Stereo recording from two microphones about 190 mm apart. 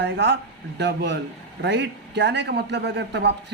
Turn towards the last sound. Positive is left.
turn(degrees=-65)  # may be behind; listen again after turning